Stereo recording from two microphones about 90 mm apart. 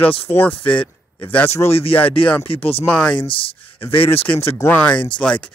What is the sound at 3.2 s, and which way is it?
Speech, 85° left.